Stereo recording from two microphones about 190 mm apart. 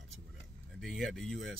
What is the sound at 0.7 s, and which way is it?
Speech, centre (ahead or behind).